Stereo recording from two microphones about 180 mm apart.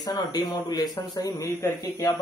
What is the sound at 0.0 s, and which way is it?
Speech, 20° left (ahead or behind).